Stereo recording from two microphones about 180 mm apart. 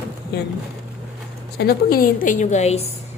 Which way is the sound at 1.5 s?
60° left (ahead or behind).